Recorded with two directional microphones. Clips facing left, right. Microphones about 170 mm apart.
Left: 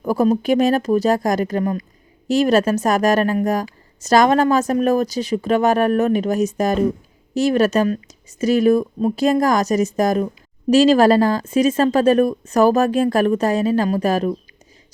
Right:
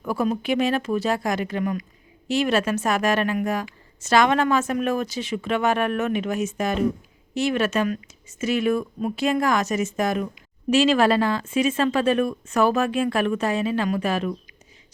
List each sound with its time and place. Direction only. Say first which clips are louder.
0.0 s speech: left 7 dB; 40° left (ahead or behind)